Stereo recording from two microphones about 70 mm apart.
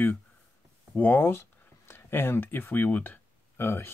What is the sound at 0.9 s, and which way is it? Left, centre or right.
Speech, left.